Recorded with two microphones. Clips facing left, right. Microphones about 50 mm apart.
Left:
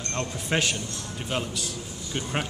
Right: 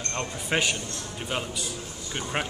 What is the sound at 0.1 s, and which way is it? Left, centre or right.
Speech, centre.